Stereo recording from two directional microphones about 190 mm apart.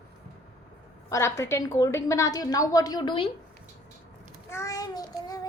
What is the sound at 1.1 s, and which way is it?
A woman's voice, 15° left (ahead or behind).